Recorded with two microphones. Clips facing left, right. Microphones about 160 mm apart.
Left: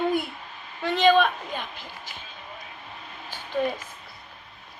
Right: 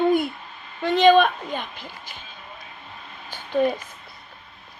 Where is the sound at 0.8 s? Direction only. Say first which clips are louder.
Right 4 dB; 5° left (ahead or behind).